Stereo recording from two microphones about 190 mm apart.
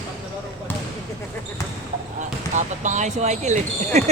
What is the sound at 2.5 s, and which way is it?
Speech, 40° right (ahead or behind).